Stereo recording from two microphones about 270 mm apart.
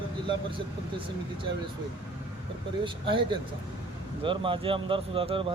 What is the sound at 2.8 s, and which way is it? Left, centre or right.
Speech, centre.